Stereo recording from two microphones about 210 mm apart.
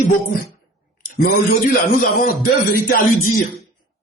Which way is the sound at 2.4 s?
45° left (ahead or behind).